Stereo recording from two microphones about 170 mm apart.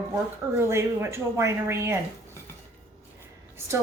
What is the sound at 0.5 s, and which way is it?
A woman's voice, 15° right (ahead or behind).